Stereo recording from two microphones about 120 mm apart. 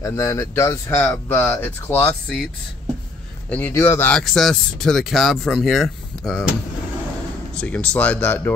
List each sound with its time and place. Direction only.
0.0 s speech: 25° left (ahead or behind)
2.2 s speech: centre (ahead or behind)
3.4 s speech: 15° left (ahead or behind)
4.1 s speech: centre (ahead or behind)
7.5 s speech: 10° left (ahead or behind)